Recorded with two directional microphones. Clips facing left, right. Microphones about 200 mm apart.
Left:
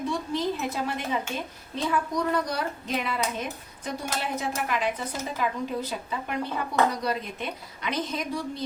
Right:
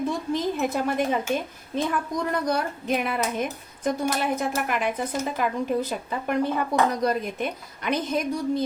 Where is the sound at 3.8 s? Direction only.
50° right (ahead or behind).